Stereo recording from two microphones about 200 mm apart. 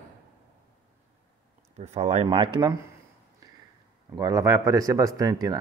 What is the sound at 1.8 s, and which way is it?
Speech, 35° right (ahead or behind).